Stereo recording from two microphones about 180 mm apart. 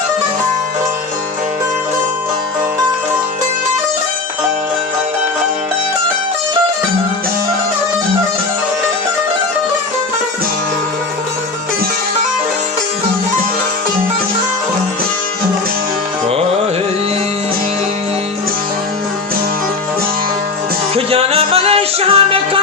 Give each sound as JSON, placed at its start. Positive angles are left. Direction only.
{"t": 20.9, "sound": "music", "side_deg": -35}